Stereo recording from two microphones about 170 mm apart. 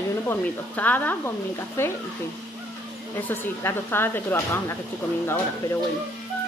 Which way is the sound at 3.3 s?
15° left (ahead or behind).